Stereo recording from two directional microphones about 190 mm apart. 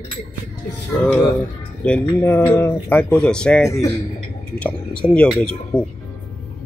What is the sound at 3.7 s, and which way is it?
Speech, 15° left (ahead or behind).